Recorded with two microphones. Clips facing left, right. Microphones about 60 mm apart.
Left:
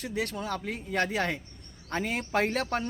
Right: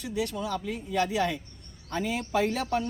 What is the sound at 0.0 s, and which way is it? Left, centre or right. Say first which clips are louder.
A man's voice: right 1 dB; left.